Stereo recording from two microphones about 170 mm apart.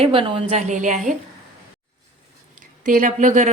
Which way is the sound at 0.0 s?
30° right (ahead or behind).